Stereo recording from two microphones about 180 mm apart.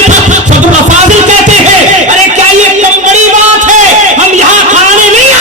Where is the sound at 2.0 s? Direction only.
40° right (ahead or behind).